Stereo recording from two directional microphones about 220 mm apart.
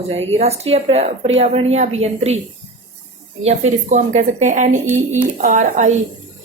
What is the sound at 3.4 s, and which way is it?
Speech, 30° right (ahead or behind).